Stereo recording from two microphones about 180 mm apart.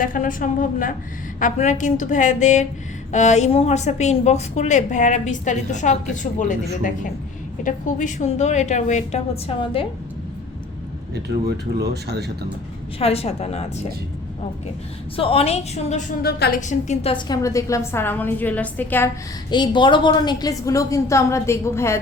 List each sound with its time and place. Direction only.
0.0 s a woman's voice: 50° left (ahead or behind); by 9.8 s 30° left (ahead or behind)
11.1 s speech: 65° right (ahead or behind)
13.0 s a woman's voice: 35° left (ahead or behind)
15.1 s a woman's voice: 30° left (ahead or behind); by 19.1 s 10° left (ahead or behind)
19.5 s a woman's voice: 25° left (ahead or behind)